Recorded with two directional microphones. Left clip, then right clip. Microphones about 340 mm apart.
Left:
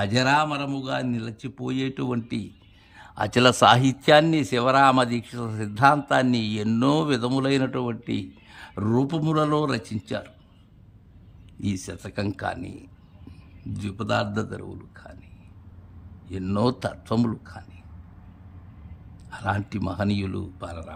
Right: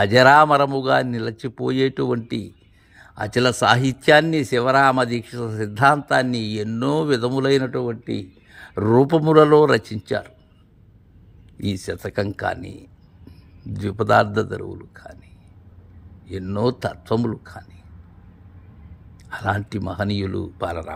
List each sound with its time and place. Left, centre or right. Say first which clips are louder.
0.0 s speech: right 9 dB; centre
7.7 s speech: right 4 dB; centre
8.0 s speech: right 2 dB; left
8.5 s speech: right 9 dB; centre
11.6 s speech: right 6 dB; centre
16.3 s speech: right 2 dB; centre
19.3 s speech: right 4 dB; centre